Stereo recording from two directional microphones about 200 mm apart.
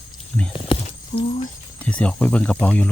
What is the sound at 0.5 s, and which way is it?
Horse, 30° left (ahead or behind).